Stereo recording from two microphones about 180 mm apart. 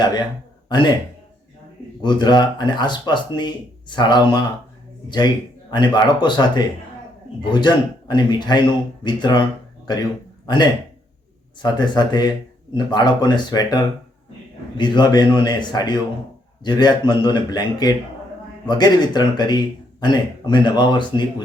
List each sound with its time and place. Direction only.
0.0 s speech: 25° left (ahead or behind)
2.0 s speech: 25° left (ahead or behind)